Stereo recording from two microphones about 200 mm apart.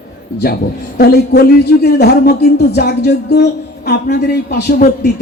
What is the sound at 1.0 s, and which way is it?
A man's voice, 50° left (ahead or behind).